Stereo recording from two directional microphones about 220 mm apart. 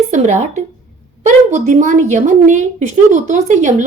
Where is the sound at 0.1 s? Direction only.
30° right (ahead or behind).